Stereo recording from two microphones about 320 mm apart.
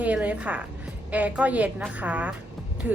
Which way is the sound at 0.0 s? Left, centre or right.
Centre.